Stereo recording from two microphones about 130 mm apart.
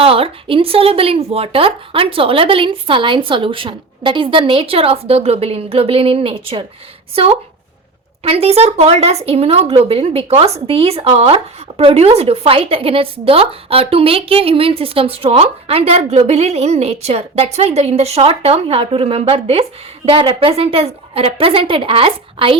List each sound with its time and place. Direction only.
0.0 s speech: 45° right (ahead or behind)
8.2 s speech: 50° right (ahead or behind)